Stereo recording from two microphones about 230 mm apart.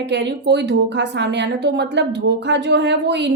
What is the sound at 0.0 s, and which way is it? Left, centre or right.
A woman's voice, right.